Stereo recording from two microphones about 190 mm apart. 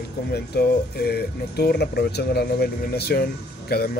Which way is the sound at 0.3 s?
55° left (ahead or behind).